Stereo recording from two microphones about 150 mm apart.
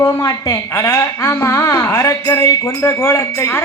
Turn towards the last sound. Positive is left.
turn(degrees=20)  # may be behind; listen again after turning